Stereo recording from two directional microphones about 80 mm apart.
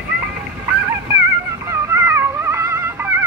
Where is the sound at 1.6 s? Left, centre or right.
Right.